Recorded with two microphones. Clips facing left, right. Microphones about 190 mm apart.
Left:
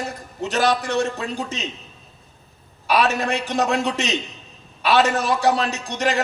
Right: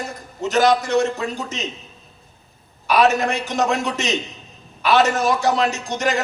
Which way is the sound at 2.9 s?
35° left (ahead or behind).